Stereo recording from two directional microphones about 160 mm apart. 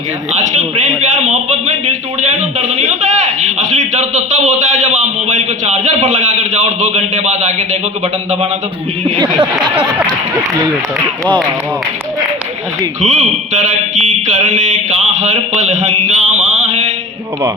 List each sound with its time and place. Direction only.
1.2 s mantra: 45° right (ahead or behind)
2.4 s a man's voice: 45° right (ahead or behind)
9.0 s speech: 30° right (ahead or behind)
13.0 s mantra: 45° right (ahead or behind)